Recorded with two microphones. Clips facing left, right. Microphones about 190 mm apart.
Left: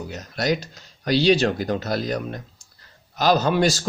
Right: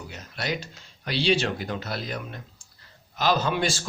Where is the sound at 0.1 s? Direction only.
40° left (ahead or behind).